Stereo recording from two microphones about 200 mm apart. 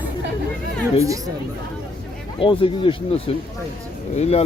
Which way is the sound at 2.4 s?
25° left (ahead or behind).